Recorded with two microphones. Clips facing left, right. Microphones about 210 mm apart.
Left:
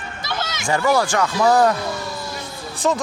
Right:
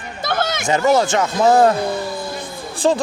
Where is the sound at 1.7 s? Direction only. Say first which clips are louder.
Right 5 dB; 55° right (ahead or behind).